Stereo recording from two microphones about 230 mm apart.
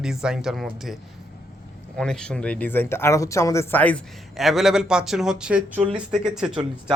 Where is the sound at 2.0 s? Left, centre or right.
Centre.